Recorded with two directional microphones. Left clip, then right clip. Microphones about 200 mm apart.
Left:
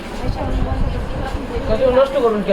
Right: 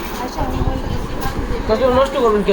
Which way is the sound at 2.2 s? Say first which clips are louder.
Right 1 dB; 15° right (ahead or behind).